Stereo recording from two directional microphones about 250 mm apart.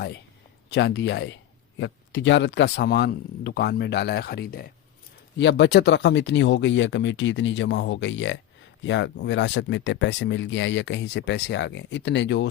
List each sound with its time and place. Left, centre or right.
0.7 s speech: left